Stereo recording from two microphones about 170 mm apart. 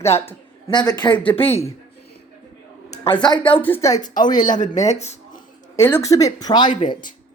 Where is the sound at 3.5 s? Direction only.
10° left (ahead or behind).